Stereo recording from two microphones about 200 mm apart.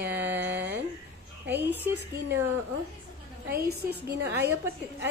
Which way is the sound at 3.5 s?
50° right (ahead or behind).